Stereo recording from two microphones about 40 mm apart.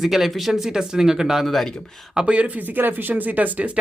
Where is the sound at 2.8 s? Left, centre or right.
Right.